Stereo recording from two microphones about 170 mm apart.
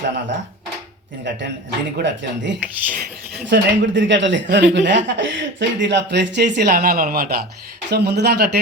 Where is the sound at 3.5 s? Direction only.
90° right; by 7.3 s 60° right (ahead or behind).